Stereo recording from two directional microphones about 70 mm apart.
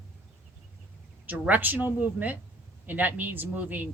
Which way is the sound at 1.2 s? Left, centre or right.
Right.